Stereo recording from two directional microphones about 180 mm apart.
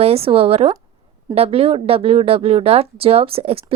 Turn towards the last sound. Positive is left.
turn(degrees=-35)  # may be behind; listen again after turning